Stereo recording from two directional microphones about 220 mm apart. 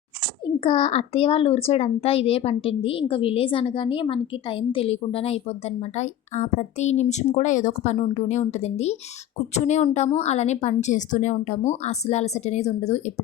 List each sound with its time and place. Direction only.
0.4 s a child's voice: 25° left (ahead or behind)